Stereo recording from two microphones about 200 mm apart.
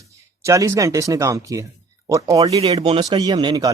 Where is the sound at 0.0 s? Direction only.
15° right (ahead or behind).